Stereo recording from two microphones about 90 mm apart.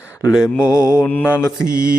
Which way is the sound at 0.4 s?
30° left (ahead or behind).